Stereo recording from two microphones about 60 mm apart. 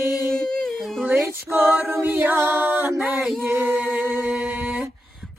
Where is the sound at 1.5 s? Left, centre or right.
Right.